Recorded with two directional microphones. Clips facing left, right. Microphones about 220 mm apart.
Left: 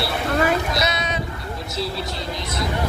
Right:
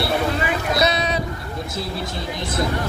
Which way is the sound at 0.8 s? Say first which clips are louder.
Right 4 dB; 35° right (ahead or behind).